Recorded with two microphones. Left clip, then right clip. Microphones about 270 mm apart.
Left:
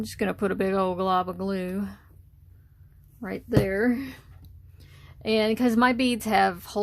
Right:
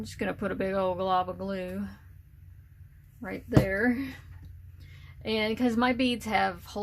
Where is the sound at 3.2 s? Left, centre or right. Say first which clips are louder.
Left 2 dB; left.